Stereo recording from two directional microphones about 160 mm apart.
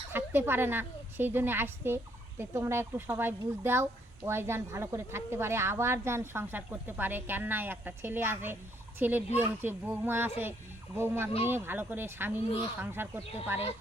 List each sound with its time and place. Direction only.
0.1 s a woman's voice: 15° right (ahead or behind)